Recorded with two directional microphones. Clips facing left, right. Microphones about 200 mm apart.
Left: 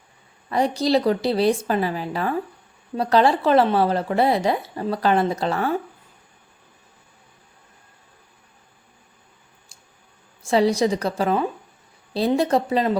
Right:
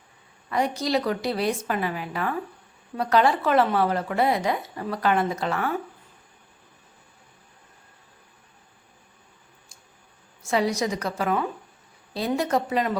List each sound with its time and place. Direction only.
0.5 s speech: 35° left (ahead or behind)
10.4 s speech: 30° left (ahead or behind)